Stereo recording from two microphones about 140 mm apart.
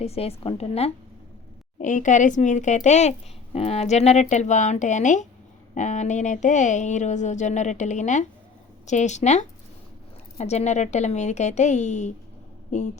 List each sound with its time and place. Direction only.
0.0 s a woman's voice: 45° left (ahead or behind)
1.8 s speech: 65° left (ahead or behind)